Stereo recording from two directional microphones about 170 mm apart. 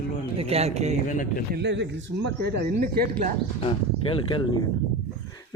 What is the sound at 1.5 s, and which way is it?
Speech, 90° right.